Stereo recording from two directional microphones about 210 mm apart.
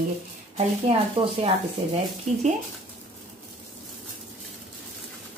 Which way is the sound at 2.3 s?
30° right (ahead or behind).